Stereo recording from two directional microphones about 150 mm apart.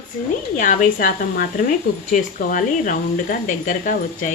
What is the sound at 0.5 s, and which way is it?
Speech, 65° left (ahead or behind).